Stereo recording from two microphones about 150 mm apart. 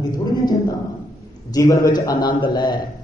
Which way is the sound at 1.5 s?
25° left (ahead or behind).